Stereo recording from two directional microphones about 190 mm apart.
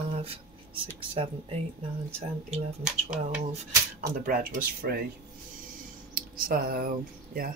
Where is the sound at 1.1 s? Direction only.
30° right (ahead or behind).